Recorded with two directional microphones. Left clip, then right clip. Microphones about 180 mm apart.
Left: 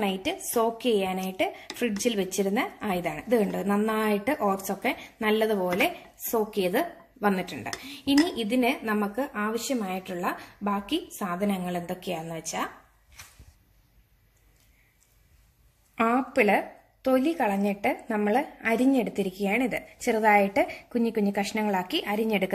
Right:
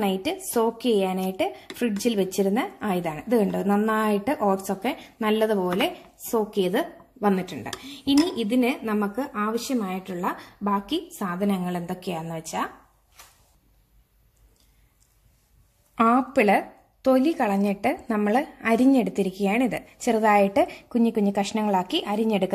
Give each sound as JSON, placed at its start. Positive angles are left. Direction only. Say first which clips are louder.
{"t": 0.0, "sound": "a woman's voice", "louder": "right 3 dB", "side_deg": -40}
{"t": 15.9, "sound": "speech", "louder": "right 4 dB", "side_deg": -45}